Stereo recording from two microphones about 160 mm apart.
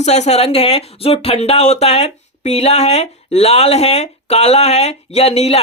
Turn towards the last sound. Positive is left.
turn(degrees=40)  # may be behind; listen again after turning